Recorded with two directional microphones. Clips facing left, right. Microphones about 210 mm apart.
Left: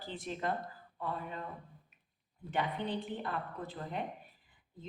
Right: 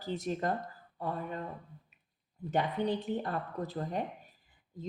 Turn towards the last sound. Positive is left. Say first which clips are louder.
# right 5 dB
turn(degrees=-40)  # may be behind; listen again after turning